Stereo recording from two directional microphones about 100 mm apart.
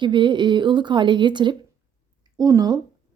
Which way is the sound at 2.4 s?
40° right (ahead or behind).